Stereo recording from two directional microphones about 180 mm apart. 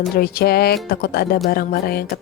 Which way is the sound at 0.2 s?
60° left (ahead or behind).